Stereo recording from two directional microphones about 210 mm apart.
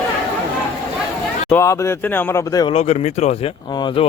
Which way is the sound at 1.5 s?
15° left (ahead or behind).